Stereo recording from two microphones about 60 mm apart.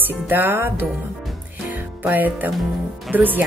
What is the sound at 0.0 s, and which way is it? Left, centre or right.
Music, right.